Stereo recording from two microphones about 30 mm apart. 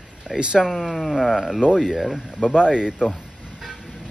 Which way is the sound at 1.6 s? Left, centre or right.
Right.